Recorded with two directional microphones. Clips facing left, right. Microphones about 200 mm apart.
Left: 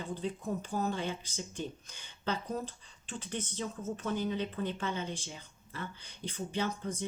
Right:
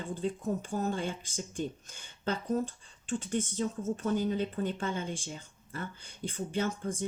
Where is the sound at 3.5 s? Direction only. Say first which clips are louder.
Right 5 dB; 45° right (ahead or behind).